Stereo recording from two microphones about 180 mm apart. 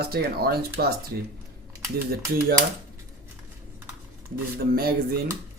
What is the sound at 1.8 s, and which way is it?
Speech, 15° right (ahead or behind).